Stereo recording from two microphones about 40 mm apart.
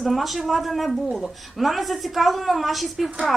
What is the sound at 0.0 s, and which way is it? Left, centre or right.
Speech, centre.